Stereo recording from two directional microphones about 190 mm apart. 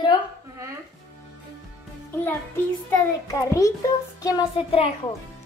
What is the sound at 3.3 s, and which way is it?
A child's voice, 15° left (ahead or behind).